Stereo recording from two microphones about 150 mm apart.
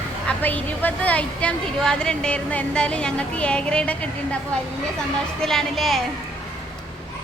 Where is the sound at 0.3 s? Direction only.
10° left (ahead or behind).